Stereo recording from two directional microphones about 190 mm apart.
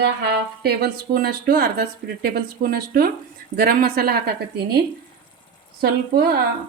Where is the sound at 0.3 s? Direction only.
55° right (ahead or behind).